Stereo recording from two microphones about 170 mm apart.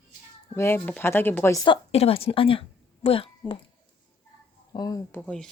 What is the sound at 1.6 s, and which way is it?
A woman's voice, 35° left (ahead or behind).